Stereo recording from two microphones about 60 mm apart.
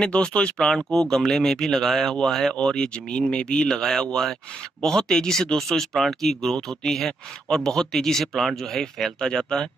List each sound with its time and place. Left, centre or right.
0.0 s speech: centre